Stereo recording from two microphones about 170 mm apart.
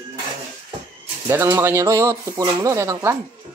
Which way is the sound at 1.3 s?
15° right (ahead or behind).